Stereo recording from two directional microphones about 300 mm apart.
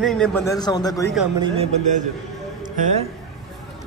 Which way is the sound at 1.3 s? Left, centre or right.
Centre.